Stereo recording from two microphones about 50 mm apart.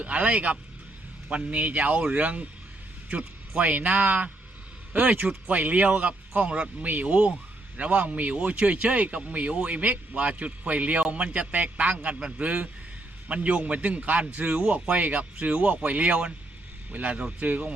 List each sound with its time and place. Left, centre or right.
0.0 s speech: right